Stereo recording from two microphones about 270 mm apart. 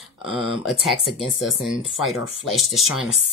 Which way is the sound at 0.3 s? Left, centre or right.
Centre.